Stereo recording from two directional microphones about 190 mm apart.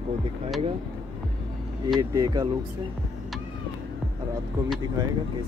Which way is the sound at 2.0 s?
20° right (ahead or behind).